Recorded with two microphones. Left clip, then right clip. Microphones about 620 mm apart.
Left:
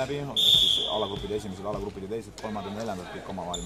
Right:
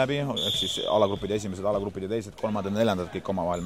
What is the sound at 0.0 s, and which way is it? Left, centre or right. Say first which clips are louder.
Speech: left 1 dB; right.